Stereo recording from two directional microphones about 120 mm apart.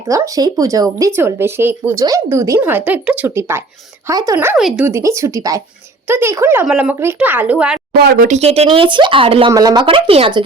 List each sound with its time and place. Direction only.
0.1 s speech: 30° right (ahead or behind)
2.6 s speech: 15° right (ahead or behind)
4.1 s speech: 30° right (ahead or behind)
4.5 s speech: centre (ahead or behind)
4.9 s speech: 25° right (ahead or behind)
8.3 s speech: 60° right (ahead or behind)
9.5 s speech: 30° right (ahead or behind)
9.8 s speech: 50° right (ahead or behind)